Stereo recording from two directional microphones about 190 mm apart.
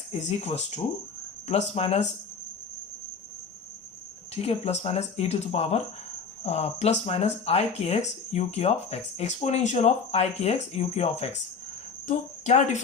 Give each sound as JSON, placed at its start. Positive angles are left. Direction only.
{"t": 0.1, "sound": "speech", "side_deg": 35}
{"t": 4.4, "sound": "speech", "side_deg": 35}